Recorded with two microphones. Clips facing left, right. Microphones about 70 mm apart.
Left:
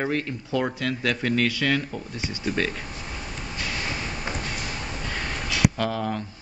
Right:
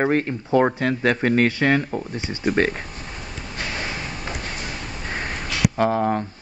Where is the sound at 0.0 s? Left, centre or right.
Right.